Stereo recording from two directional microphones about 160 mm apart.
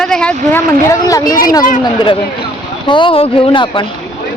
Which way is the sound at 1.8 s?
25° left (ahead or behind).